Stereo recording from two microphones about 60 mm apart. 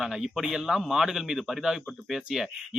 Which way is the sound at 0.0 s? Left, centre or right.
Centre.